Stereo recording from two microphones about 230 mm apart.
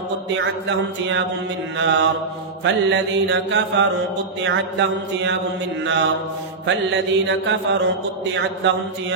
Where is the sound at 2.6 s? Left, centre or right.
Right.